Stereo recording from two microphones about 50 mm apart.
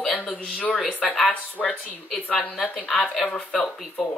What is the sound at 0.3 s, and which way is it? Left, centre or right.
A woman's voice, left.